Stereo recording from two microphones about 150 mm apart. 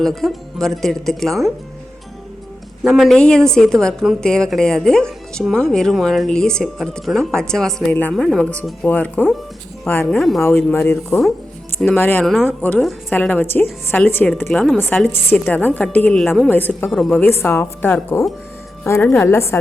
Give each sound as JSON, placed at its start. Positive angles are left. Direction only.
{"t": 0.0, "sound": "a woman's voice", "side_deg": 0}
{"t": 2.8, "sound": "a woman's voice", "side_deg": 0}
{"t": 10.2, "sound": "a woman's voice", "side_deg": 0}
{"t": 11.9, "sound": "a woman's voice", "side_deg": 10}
{"t": 16.5, "sound": "a woman's voice", "side_deg": 10}
{"t": 16.9, "sound": "a woman's voice", "side_deg": 0}
{"t": 17.2, "sound": "a woman's voice", "side_deg": 15}